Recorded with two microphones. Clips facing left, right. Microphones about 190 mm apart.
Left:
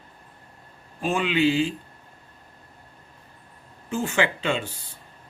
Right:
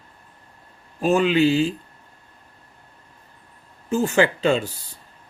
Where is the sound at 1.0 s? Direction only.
40° right (ahead or behind).